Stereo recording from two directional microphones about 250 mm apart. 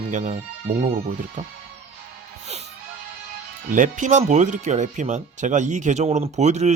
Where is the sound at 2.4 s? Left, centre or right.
Right.